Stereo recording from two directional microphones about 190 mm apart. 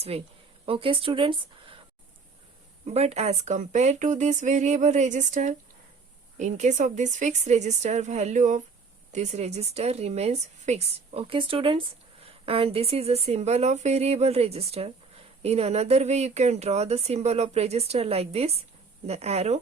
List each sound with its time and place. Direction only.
0.1 s a woman's voice: 30° right (ahead or behind)
2.8 s speech: 35° right (ahead or behind)